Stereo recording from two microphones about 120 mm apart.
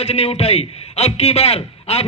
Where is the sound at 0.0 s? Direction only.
55° left (ahead or behind).